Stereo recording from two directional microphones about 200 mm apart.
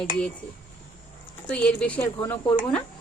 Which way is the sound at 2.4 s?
25° left (ahead or behind).